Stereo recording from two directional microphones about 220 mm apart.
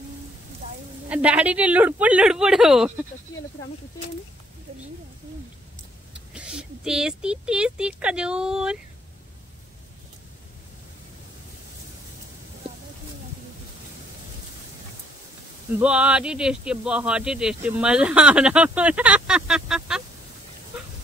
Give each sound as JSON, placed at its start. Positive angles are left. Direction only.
{"t": 0.6, "sound": "a sound", "side_deg": -35}
{"t": 1.0, "sound": "speech", "side_deg": -5}
{"t": 6.3, "sound": "speech", "side_deg": -5}
{"t": 15.8, "sound": "speech", "side_deg": -5}